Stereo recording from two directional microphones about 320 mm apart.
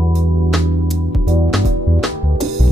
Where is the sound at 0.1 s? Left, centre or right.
Centre.